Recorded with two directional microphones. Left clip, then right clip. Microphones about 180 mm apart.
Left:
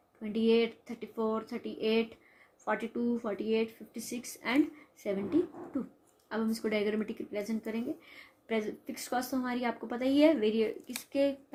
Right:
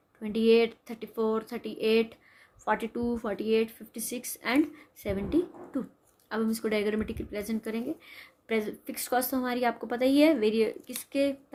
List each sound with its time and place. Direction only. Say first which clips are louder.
0.2 s speech: right 5 dB; 45° right (ahead or behind)